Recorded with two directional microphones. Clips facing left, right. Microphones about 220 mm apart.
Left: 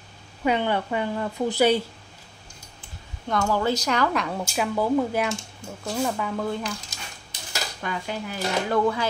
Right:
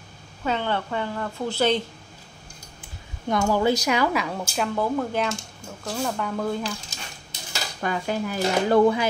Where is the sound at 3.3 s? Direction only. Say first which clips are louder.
Right 2 dB; 15° right (ahead or behind).